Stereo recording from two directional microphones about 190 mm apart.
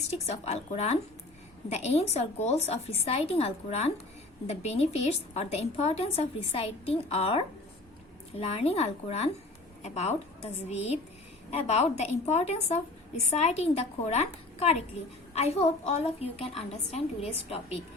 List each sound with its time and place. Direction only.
0.1 s a woman's voice: 35° left (ahead or behind)